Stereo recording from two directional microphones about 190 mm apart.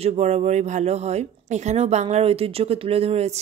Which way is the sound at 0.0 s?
35° right (ahead or behind).